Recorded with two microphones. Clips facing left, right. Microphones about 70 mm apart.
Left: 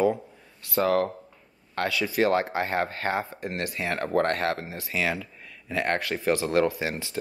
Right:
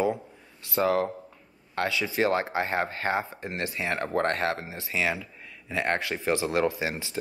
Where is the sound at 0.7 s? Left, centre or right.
Centre.